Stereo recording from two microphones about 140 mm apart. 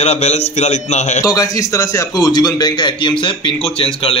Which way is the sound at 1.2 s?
25° left (ahead or behind).